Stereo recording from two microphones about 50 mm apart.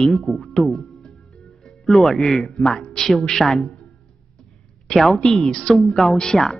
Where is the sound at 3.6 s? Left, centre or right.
Left.